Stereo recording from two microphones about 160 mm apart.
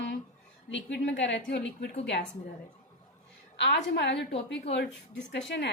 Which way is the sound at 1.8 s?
90° left.